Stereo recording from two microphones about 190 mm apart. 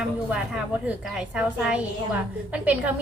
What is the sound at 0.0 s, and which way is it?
A woman's voice, 5° right (ahead or behind).